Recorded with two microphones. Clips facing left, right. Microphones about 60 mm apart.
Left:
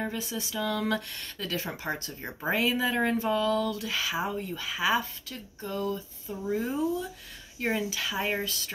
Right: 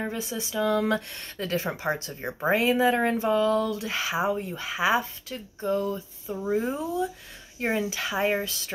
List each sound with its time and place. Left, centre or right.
0.0 s speech: right